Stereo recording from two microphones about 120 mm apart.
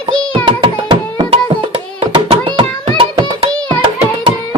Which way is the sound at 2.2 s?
55° right (ahead or behind).